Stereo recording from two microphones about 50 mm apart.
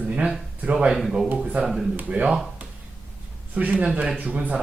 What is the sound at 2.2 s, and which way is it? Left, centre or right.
Speech, right.